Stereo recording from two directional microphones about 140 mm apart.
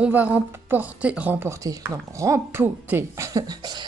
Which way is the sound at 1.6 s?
25° right (ahead or behind).